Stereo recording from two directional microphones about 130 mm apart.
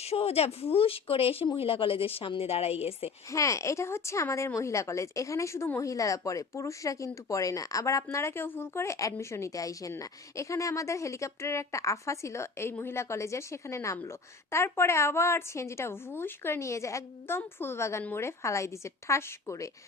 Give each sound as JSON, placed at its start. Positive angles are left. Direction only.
{"t": 0.0, "sound": "a woman's voice", "side_deg": 50}
{"t": 3.3, "sound": "a woman's voice", "side_deg": 25}